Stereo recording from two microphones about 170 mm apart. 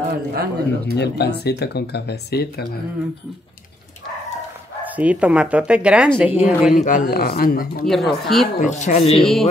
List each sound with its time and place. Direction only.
0.3 s speech: 70° right (ahead or behind)
0.9 s speech: 75° left (ahead or behind)
4.8 s speech: 10° right (ahead or behind)
6.8 s speech: 50° left (ahead or behind)
7.8 s speech: centre (ahead or behind)
8.5 s speech: 45° left (ahead or behind)
9.2 s speech: centre (ahead or behind)